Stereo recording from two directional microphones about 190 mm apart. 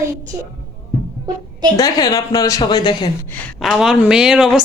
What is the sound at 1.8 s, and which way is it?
Speech, 20° left (ahead or behind).